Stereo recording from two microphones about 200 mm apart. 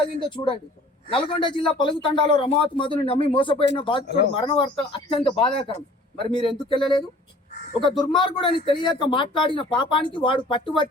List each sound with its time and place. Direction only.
0.2 s speech: 25° left (ahead or behind)